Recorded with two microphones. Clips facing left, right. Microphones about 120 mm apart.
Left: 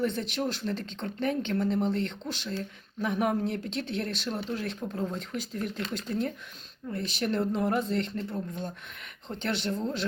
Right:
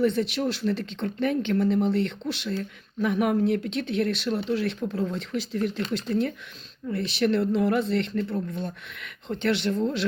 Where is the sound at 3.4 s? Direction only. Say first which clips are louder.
Right 7 dB; 60° right (ahead or behind).